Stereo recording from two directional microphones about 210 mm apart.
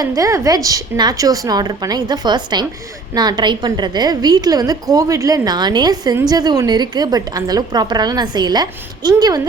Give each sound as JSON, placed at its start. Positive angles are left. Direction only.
{"t": 0.0, "sound": "a woman's voice", "side_deg": -15}